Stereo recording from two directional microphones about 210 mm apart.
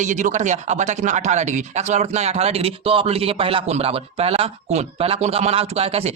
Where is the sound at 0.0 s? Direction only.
35° right (ahead or behind).